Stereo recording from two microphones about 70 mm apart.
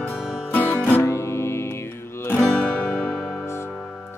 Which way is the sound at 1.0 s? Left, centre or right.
Left.